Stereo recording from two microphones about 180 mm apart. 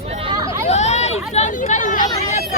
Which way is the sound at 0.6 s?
40° left (ahead or behind).